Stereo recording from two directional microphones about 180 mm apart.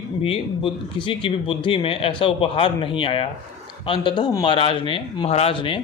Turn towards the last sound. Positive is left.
turn(degrees=30)  # may be behind; listen again after turning